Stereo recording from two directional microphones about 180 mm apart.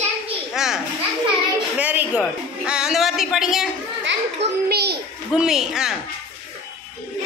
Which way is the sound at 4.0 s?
75° right (ahead or behind).